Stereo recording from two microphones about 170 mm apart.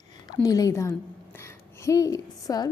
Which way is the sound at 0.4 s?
20° left (ahead or behind).